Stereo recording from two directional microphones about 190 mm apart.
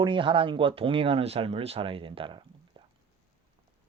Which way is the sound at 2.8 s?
25° right (ahead or behind).